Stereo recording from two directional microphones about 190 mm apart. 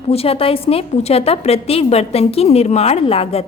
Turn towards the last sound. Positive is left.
turn(degrees=30)  # may be behind; listen again after turning